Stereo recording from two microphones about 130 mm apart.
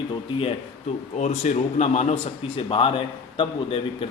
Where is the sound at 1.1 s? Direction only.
60° left (ahead or behind).